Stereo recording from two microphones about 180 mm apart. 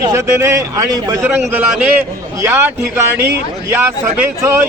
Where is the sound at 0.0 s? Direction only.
15° right (ahead or behind).